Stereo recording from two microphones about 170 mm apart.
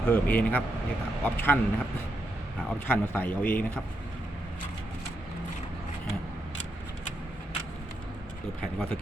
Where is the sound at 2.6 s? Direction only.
10° left (ahead or behind).